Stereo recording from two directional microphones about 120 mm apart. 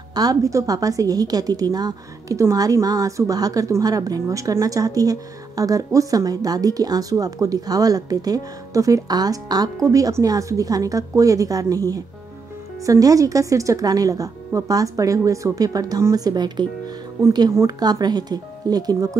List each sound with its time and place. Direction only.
0.1 s a woman's voice: 30° right (ahead or behind)